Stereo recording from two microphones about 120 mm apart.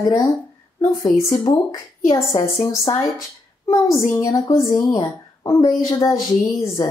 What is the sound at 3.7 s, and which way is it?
Speech, 25° left (ahead or behind).